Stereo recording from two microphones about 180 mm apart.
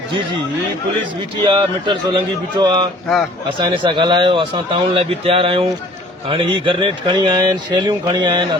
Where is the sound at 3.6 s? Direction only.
25° right (ahead or behind).